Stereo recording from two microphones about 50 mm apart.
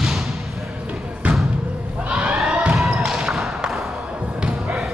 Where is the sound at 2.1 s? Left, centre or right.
Centre.